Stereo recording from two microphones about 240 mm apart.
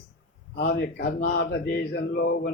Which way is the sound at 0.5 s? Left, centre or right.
Left.